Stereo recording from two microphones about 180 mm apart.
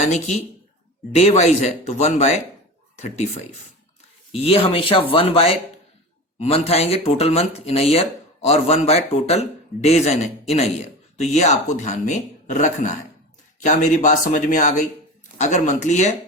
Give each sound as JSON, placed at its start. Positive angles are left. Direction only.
{"t": 0.0, "sound": "speech", "side_deg": 40}